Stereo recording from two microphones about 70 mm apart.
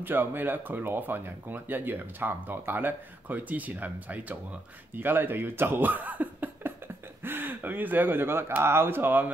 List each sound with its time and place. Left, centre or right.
0.0 s speech: right